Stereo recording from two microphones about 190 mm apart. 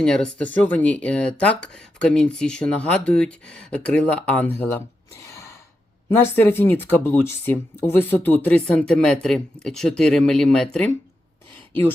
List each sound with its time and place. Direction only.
0.0 s speech: 5° left (ahead or behind)
5.2 s gasp: 15° left (ahead or behind)
6.1 s speech: 10° left (ahead or behind)